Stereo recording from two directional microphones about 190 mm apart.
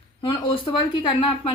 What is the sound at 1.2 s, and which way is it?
Speech, 30° left (ahead or behind).